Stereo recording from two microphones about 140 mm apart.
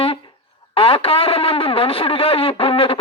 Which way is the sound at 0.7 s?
40° left (ahead or behind).